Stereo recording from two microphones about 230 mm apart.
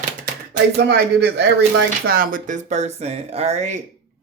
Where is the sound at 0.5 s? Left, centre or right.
Right.